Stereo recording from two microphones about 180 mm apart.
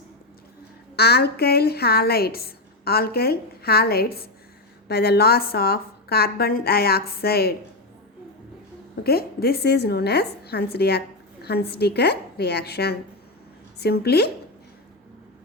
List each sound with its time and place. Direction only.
0.9 s a woman's voice: 60° left (ahead or behind)
9.0 s a woman's voice: 60° left (ahead or behind)